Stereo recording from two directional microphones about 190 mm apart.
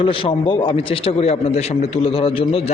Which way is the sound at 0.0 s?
30° left (ahead or behind).